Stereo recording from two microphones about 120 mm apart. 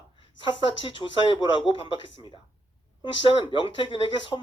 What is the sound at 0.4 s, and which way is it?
Speech, 45° left (ahead or behind).